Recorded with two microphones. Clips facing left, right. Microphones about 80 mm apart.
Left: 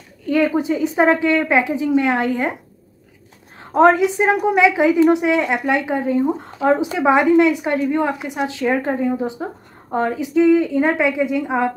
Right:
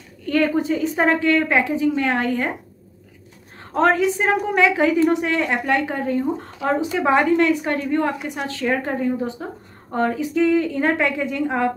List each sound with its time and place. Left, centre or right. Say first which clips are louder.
0.3 s a woman's voice: left 2 dB; centre
3.7 s a woman's voice: left 4 dB; centre